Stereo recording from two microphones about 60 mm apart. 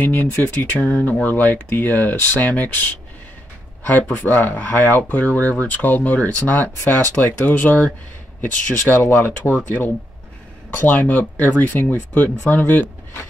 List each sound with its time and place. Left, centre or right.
0.0 s speech: left
10.7 s speech: left